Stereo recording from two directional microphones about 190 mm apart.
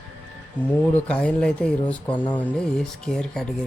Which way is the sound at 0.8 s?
10° left (ahead or behind).